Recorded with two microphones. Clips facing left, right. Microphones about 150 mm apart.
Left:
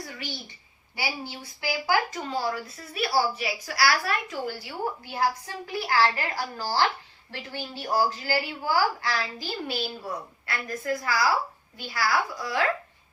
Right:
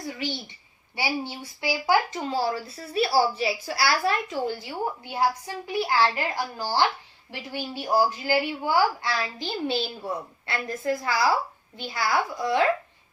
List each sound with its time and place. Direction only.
0.9 s a woman's voice: 25° right (ahead or behind)